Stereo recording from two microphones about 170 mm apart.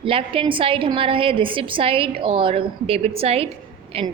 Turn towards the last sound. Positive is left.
turn(degrees=-35)  # may be behind; listen again after turning